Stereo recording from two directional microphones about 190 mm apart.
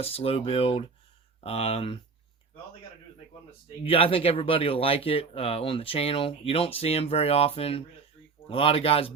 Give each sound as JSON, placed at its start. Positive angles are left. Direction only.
{"t": 0.0, "sound": "speech", "side_deg": 30}
{"t": 3.8, "sound": "speech", "side_deg": 30}